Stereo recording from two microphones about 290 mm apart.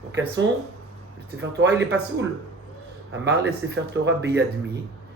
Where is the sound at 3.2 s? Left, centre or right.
Right.